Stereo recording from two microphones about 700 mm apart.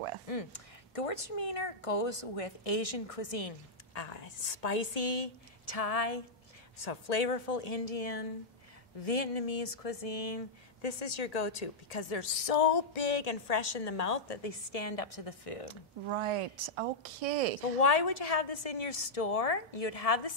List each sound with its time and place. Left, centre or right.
0.3 s speech: left
15.7 s speech: right
17.7 s speech: left